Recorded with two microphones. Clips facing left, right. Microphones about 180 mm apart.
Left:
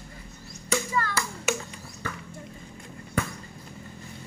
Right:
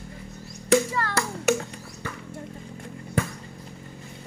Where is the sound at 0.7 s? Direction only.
70° right (ahead or behind).